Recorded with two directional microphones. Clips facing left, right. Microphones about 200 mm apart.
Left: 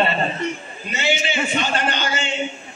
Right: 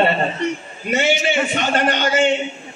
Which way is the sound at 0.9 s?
65° right (ahead or behind).